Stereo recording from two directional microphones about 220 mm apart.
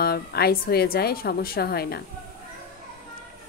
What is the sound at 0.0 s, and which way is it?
Speech, 45° left (ahead or behind).